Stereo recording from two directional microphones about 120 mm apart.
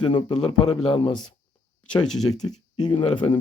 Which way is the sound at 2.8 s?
45° left (ahead or behind).